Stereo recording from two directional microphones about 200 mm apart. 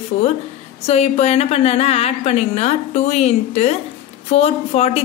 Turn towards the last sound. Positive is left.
turn(degrees=30)  # may be behind; listen again after turning